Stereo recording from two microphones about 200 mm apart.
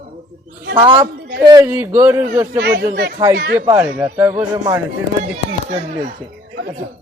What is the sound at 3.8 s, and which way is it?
Speech, 10° right (ahead or behind).